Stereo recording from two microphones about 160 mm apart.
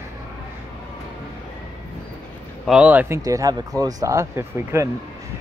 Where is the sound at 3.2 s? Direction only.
20° right (ahead or behind).